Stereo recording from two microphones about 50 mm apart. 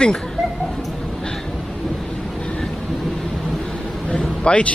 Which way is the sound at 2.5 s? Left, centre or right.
Centre.